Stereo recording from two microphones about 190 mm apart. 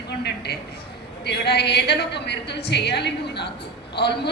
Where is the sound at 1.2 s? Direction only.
60° left (ahead or behind).